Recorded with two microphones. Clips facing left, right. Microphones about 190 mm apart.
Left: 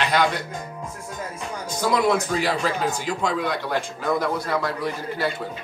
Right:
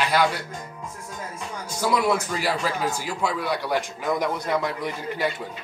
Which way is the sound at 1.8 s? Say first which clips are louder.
Left 2 dB; 10° right (ahead or behind).